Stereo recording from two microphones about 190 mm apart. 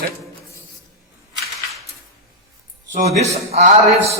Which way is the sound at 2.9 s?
40° right (ahead or behind).